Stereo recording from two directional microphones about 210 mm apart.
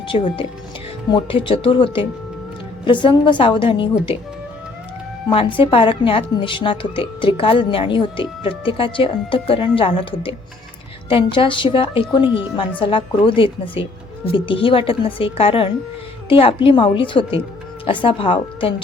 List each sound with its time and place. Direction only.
0.1 s a woman's voice: 30° left (ahead or behind)
5.3 s a woman's voice: 25° left (ahead or behind)